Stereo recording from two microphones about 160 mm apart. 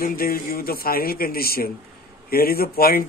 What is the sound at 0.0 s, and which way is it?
Speech, 65° left (ahead or behind).